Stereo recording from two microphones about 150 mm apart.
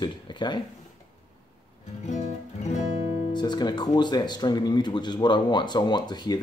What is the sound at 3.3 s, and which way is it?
Speech, 30° left (ahead or behind).